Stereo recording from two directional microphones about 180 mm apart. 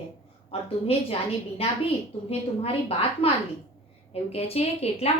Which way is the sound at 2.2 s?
35° left (ahead or behind).